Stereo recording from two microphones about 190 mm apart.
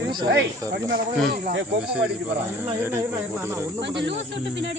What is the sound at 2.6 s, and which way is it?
Speech, 10° right (ahead or behind).